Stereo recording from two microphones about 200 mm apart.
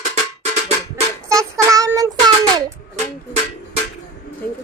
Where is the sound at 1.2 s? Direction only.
15° right (ahead or behind).